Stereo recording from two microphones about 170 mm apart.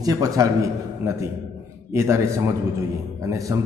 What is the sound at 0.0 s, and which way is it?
A man's voice, 20° right (ahead or behind).